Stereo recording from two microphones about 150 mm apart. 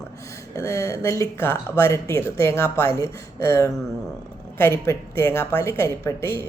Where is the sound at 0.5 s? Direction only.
20° left (ahead or behind).